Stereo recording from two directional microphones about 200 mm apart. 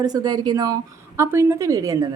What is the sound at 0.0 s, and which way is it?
Speech, 20° right (ahead or behind).